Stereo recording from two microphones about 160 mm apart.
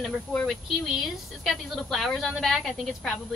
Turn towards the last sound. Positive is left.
turn(degrees=0)  # may be behind; listen again after turning